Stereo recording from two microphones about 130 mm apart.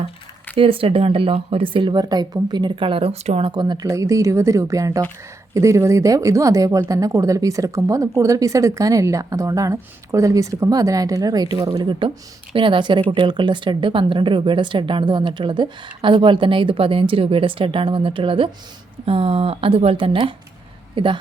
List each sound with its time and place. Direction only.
0.5 s speech: 45° right (ahead or behind)
3.5 s speech: 35° right (ahead or behind)